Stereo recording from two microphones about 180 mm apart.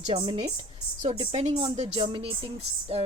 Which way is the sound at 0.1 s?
30° right (ahead or behind).